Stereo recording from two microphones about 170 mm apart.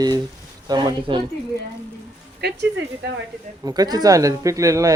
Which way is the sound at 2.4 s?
75° right (ahead or behind).